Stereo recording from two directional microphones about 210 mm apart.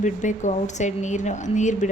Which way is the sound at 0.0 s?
35° left (ahead or behind).